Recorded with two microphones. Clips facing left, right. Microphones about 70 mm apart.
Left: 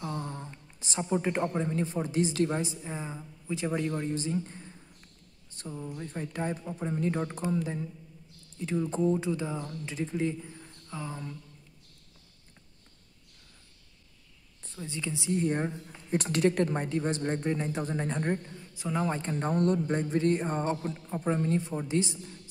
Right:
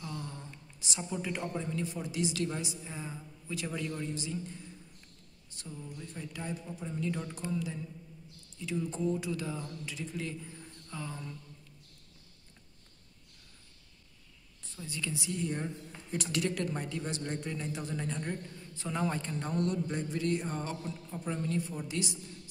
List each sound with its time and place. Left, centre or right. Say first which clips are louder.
0.0 s a sound: left 6 dB; left
0.7 s a woman's voice: left 8 dB; left
10.4 s a sound: left 1 dB; centre
14.8 s a woman's voice: left 3 dB; left
15.3 s speech: left 10 dB; left
18.6 s a man's voice: left 4 dB; centre
19.0 s a woman's voice: left 3 dB; left
19.3 s speech: left 6 dB; left